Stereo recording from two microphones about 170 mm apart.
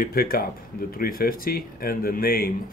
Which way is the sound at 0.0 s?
60° left (ahead or behind).